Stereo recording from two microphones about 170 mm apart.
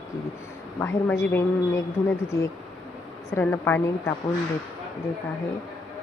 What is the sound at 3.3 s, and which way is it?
Speech, 15° left (ahead or behind).